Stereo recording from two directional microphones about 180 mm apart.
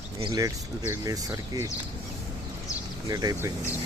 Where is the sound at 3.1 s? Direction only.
20° right (ahead or behind).